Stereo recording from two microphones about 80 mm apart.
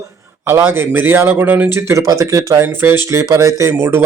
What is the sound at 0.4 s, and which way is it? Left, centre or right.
Speech, right.